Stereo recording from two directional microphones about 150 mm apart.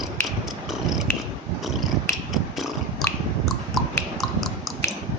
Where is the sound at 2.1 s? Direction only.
15° left (ahead or behind).